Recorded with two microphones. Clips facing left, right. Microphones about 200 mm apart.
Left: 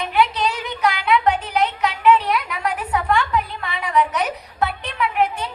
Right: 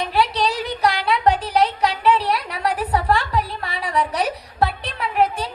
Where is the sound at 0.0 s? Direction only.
35° right (ahead or behind).